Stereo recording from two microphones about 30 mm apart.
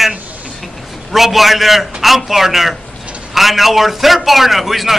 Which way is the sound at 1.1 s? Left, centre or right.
Centre.